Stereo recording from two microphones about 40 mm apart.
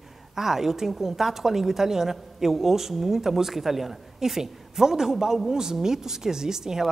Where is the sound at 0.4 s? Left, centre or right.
Centre.